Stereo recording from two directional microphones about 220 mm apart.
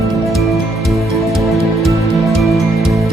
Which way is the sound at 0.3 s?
Centre (ahead or behind).